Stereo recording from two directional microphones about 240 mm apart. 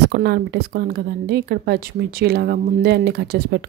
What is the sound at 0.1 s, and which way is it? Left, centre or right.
A woman's voice, right.